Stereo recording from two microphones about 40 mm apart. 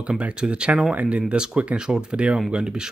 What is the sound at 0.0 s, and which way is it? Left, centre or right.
Speech, right.